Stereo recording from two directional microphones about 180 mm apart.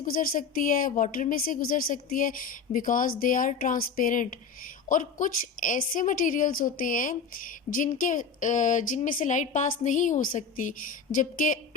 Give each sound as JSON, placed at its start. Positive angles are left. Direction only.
{"t": 0.0, "sound": "a woman's voice", "side_deg": 50}